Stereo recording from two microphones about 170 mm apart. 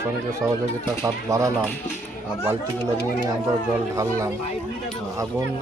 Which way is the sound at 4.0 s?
20° right (ahead or behind).